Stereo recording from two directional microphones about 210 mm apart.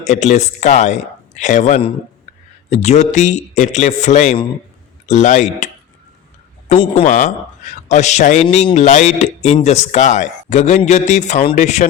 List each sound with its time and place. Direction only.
0.0 s a man's voice: 35° left (ahead or behind)